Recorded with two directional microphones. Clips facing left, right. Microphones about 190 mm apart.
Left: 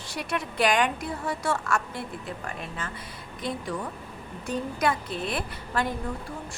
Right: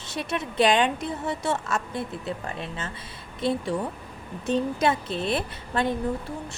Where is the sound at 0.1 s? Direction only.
20° right (ahead or behind).